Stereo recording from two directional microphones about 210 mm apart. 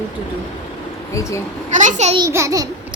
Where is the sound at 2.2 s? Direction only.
15° right (ahead or behind).